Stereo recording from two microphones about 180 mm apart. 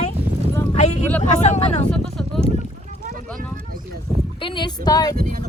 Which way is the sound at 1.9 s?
Centre (ahead or behind).